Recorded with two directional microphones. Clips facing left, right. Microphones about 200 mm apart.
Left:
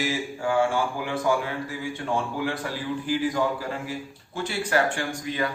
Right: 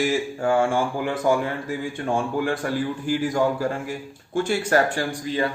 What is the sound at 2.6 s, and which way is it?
A man's voice, 50° right (ahead or behind).